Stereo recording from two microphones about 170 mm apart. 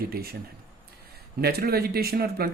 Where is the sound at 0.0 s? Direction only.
65° right (ahead or behind).